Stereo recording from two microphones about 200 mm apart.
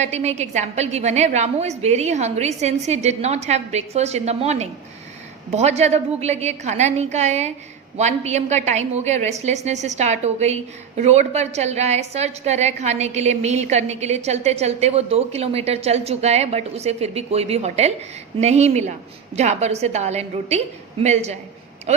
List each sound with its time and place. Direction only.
0.0 s a woman's voice: 35° right (ahead or behind)